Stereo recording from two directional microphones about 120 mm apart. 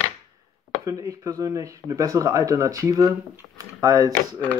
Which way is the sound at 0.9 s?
30° right (ahead or behind).